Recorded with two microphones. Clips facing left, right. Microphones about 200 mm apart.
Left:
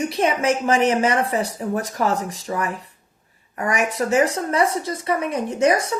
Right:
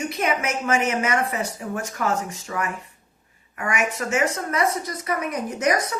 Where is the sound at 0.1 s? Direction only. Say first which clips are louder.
Left 5 dB; 30° left (ahead or behind).